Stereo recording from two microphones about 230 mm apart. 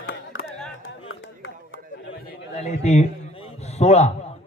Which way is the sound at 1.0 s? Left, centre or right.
Left.